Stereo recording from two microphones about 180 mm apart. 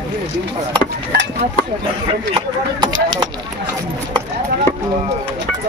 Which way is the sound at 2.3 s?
25° right (ahead or behind).